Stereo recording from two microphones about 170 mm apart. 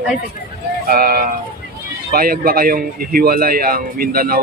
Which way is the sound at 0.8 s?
60° right (ahead or behind).